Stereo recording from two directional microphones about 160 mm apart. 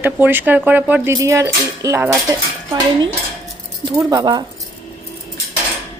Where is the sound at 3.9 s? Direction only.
20° right (ahead or behind).